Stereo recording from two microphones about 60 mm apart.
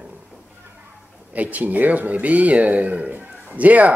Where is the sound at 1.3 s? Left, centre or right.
Right.